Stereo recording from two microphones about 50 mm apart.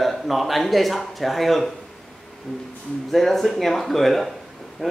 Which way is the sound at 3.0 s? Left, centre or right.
Centre.